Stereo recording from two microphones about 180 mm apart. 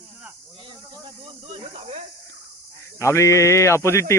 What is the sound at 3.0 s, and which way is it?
Speech, 15° left (ahead or behind).